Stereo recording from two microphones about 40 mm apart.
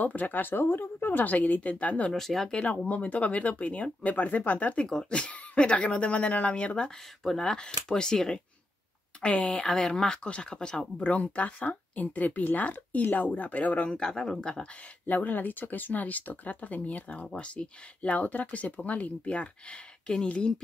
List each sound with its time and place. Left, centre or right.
0.0 s speech: left
2.1 s speech: centre
2.9 s speech: left; by 8.4 s centre
9.2 s speech: left
9.5 s speech: centre
11.0 s speech: left
13.8 s speech: centre
15.0 s speech: left
17.3 s speech: left
20.1 s speech: left